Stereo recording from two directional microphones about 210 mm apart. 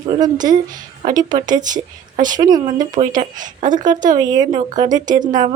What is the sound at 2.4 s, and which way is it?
Speech, 20° right (ahead or behind).